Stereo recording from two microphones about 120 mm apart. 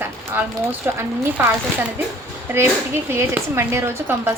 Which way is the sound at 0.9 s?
20° right (ahead or behind).